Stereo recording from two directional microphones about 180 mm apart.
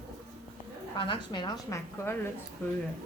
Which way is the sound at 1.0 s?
25° left (ahead or behind).